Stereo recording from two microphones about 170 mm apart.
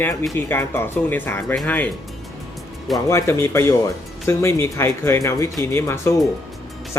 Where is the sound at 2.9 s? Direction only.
15° left (ahead or behind).